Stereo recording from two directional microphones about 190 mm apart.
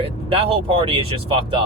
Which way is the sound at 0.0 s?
30° right (ahead or behind).